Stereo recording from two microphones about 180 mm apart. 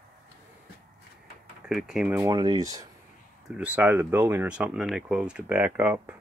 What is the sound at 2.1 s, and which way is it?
Speech, 20° right (ahead or behind).